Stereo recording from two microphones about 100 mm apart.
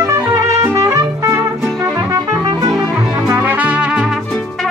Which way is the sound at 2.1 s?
40° right (ahead or behind).